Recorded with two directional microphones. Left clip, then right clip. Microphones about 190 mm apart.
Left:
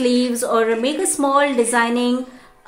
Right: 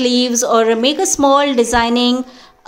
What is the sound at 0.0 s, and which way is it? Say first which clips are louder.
A woman's voice: right 4 dB; 35° right (ahead or behind).